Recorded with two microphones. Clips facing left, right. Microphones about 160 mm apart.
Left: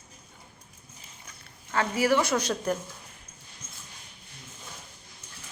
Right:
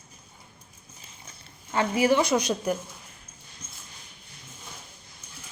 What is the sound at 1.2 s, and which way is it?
Speech, 20° right (ahead or behind).